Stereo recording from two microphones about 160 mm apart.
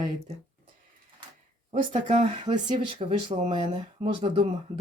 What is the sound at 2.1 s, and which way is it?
Speech, 30° right (ahead or behind).